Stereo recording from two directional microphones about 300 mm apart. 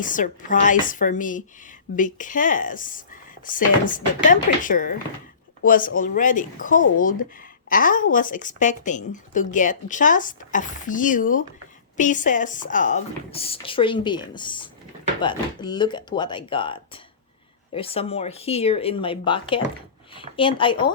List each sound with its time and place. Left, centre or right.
0.0 s speech: left